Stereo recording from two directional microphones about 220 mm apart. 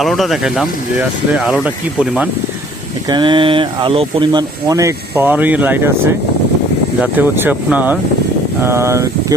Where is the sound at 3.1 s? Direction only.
20° right (ahead or behind).